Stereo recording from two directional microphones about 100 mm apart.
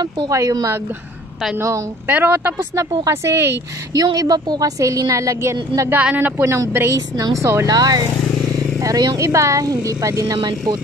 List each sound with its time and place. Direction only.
0.0 s speech: 40° right (ahead or behind)
2.0 s a woman's voice: 20° right (ahead or behind)
3.9 s speech: 40° right (ahead or behind)
5.9 s a woman's voice: 15° right (ahead or behind)
6.4 s a woman's voice: 30° right (ahead or behind)
7.6 s speech: 40° right (ahead or behind)